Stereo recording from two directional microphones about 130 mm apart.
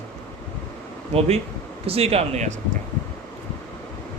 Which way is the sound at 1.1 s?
55° right (ahead or behind).